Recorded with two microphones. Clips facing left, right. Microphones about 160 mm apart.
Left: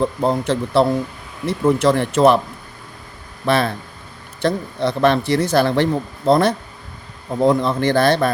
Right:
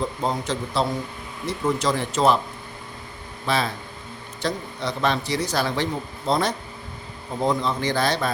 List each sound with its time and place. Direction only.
0.0 s speech: 60° left (ahead or behind)
3.4 s speech: 60° left (ahead or behind)